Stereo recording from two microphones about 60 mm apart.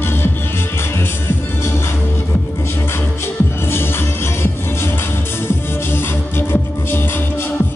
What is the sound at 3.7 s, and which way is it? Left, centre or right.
Music, left.